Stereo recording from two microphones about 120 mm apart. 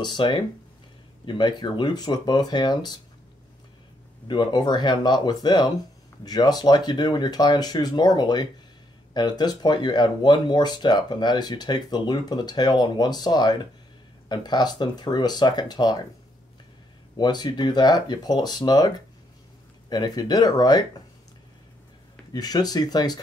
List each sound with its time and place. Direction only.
0.0 s speech: 40° left (ahead or behind)
4.3 s speech: 40° left (ahead or behind)
17.2 s speech: 35° left (ahead or behind)
22.3 s speech: 35° left (ahead or behind)